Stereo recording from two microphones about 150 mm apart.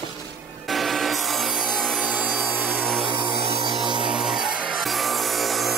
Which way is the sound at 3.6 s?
30° right (ahead or behind).